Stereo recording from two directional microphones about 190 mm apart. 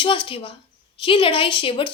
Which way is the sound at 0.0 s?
25° left (ahead or behind).